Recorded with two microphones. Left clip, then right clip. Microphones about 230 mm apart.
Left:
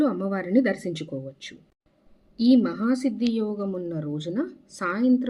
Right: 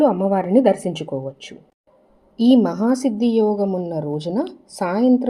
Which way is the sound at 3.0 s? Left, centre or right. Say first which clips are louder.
Right 8 dB; centre.